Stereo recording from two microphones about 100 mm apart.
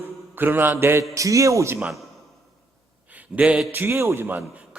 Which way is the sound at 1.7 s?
5° right (ahead or behind).